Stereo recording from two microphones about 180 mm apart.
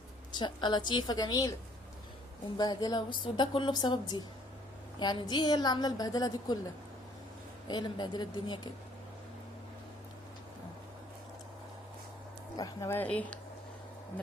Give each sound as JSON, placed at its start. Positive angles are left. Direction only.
{"t": 0.3, "sound": "a woman's voice", "side_deg": 25}
{"t": 2.6, "sound": "a woman's voice", "side_deg": 20}
{"t": 7.7, "sound": "a woman's voice", "side_deg": 25}
{"t": 12.5, "sound": "speech", "side_deg": 20}